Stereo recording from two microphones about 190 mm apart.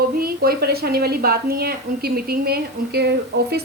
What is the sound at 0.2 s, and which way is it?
A woman's voice, 55° right (ahead or behind).